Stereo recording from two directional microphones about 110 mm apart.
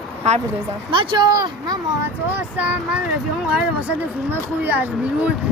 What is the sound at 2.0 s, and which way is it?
Speech, 15° right (ahead or behind).